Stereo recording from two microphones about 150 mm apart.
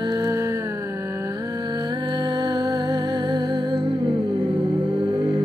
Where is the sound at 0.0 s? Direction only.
25° right (ahead or behind).